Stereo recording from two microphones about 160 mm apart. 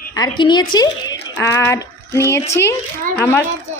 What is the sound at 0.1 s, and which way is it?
A woman's voice, 25° left (ahead or behind).